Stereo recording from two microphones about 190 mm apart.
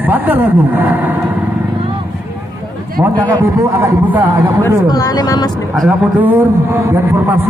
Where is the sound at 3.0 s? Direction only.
15° right (ahead or behind).